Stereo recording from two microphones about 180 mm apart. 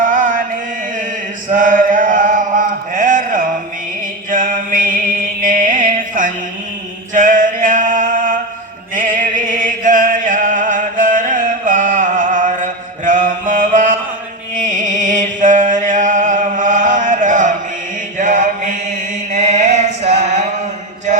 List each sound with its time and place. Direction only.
0.0 s chant: 45° right (ahead or behind)
1.5 s chant: 45° right (ahead or behind)
4.3 s a sound: 45° right (ahead or behind)
5.4 s music: 45° right (ahead or behind)
7.1 s a sound: 45° right (ahead or behind)
9.0 s music: 45° right (ahead or behind)
13.1 s mantra: 45° right (ahead or behind)
14.5 s music: 45° right (ahead or behind)
18.2 s mantra: 45° right (ahead or behind)
19.3 s music: 40° right (ahead or behind)